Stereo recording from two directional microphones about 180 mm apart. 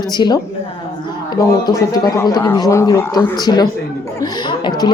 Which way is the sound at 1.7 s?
20° left (ahead or behind).